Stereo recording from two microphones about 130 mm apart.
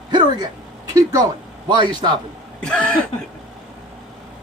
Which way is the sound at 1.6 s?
35° right (ahead or behind).